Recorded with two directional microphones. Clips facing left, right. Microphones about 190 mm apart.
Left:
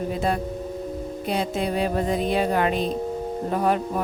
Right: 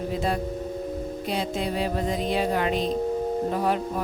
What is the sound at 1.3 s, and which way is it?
Speech, 55° left (ahead or behind).